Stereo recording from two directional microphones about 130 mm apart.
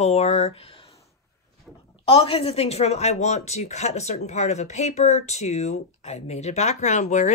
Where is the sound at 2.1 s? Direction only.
50° left (ahead or behind).